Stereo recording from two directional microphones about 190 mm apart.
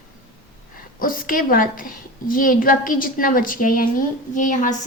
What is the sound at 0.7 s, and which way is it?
A woman's voice, 45° left (ahead or behind).